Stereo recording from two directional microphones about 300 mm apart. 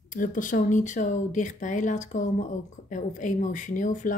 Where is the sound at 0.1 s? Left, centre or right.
Left.